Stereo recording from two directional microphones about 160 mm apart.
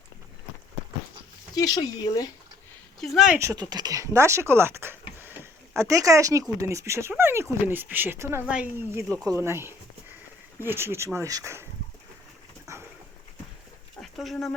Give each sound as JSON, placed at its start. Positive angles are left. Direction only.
{"t": 1.5, "sound": "speech", "side_deg": 25}
{"t": 3.0, "sound": "speech", "side_deg": 0}
{"t": 3.3, "sound": "speech", "side_deg": -20}
{"t": 5.2, "sound": "a sound", "side_deg": -15}
{"t": 6.6, "sound": "speech", "side_deg": -20}
{"t": 14.0, "sound": "dog", "side_deg": 0}